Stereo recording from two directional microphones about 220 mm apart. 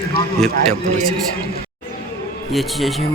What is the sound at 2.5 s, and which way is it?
Speech, centre (ahead or behind).